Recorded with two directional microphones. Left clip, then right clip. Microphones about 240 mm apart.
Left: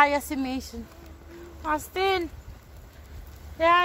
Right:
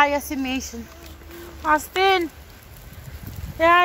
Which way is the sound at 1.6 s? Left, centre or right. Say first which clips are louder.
Right 7 dB; right.